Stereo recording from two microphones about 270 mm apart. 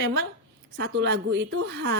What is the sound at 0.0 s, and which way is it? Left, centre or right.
Speech, right.